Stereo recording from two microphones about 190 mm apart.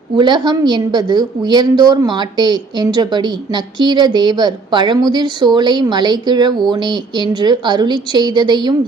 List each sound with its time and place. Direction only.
0.2 s a woman's voice: 25° right (ahead or behind)